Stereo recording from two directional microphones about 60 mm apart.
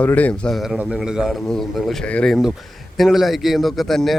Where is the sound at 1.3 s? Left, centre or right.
Centre.